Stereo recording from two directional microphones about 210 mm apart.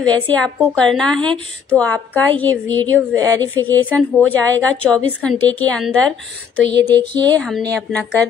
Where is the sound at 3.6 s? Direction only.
10° left (ahead or behind).